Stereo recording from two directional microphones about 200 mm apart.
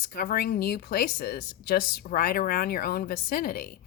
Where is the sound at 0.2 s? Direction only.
50° left (ahead or behind).